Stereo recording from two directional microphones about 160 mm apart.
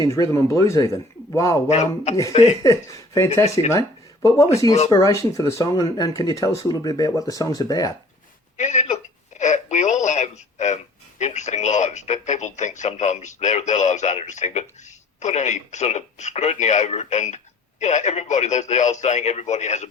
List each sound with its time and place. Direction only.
0.0 s speech: 20° left (ahead or behind)
1.7 s speech: 45° left (ahead or behind)
2.6 s speech: 20° left (ahead or behind)
8.5 s speech: 45° left (ahead or behind)